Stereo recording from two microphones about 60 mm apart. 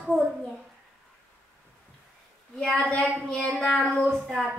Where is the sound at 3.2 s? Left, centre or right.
Centre.